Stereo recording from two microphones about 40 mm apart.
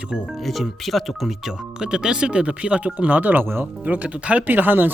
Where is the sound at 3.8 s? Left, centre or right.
Right.